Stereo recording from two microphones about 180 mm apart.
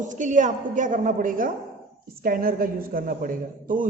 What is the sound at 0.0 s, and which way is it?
A woman's voice, 45° right (ahead or behind).